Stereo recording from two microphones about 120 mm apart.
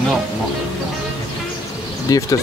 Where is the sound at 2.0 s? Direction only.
30° left (ahead or behind).